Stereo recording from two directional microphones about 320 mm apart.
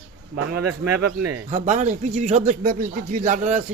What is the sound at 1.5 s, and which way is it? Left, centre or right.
Speech, right.